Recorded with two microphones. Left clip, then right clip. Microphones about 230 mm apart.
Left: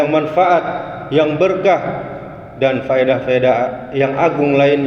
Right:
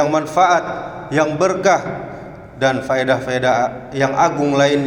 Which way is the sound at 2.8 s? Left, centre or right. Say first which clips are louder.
Left 3 dB; centre.